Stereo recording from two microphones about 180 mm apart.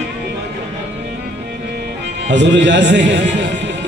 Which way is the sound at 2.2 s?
80° right.